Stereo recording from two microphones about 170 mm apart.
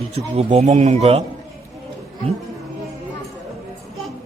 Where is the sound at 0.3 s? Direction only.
35° right (ahead or behind).